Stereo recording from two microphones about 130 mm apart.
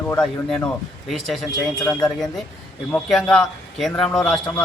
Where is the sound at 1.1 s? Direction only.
Centre (ahead or behind).